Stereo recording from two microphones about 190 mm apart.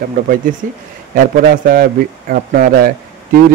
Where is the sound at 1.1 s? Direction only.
50° right (ahead or behind).